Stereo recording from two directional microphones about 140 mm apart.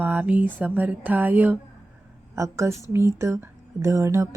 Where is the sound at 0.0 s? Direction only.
15° right (ahead or behind).